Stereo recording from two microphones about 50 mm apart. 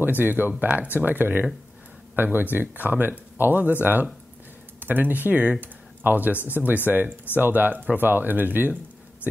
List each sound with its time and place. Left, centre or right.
0.2 s speech: right